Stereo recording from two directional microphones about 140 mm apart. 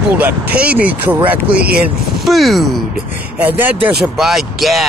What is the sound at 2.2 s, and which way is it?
Speech, centre (ahead or behind).